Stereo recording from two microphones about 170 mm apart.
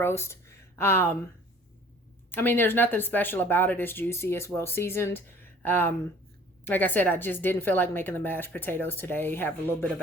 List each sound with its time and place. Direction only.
0.0 s speech: 15° left (ahead or behind)
2.3 s speech: 10° left (ahead or behind)